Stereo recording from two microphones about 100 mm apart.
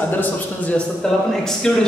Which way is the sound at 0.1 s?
15° left (ahead or behind).